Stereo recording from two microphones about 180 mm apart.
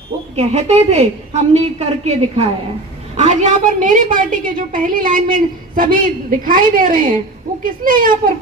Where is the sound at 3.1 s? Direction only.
40° right (ahead or behind).